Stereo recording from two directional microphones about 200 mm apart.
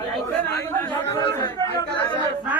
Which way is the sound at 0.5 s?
10° left (ahead or behind).